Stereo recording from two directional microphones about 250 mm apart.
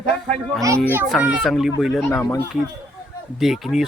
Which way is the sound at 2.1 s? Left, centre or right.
Centre.